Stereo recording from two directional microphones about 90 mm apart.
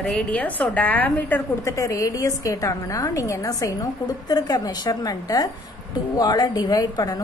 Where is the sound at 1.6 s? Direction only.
35° left (ahead or behind).